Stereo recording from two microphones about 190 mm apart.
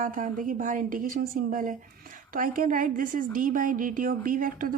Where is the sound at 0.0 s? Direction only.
45° right (ahead or behind).